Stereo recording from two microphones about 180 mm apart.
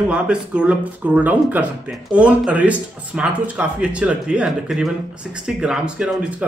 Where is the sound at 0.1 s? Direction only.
5° right (ahead or behind).